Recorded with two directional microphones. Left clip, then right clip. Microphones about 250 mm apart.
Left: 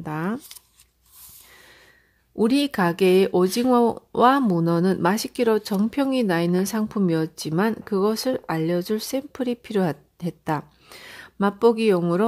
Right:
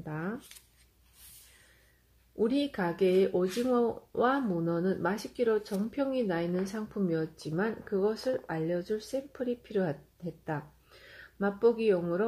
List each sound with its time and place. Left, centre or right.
0.0 s shuffling cards: left
2.3 s speech: left